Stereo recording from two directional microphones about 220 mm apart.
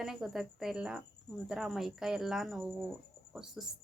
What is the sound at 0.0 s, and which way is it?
Speech, centre (ahead or behind).